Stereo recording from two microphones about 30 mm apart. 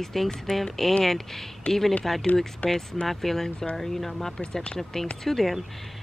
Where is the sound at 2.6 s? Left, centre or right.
Left.